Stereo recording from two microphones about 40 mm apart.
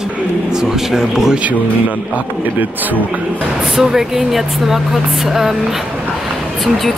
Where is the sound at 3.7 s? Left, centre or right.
Centre.